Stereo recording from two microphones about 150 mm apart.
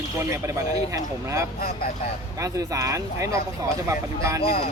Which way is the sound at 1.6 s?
90° left.